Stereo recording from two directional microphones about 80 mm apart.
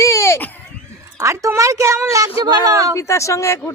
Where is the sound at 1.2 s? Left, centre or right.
Right.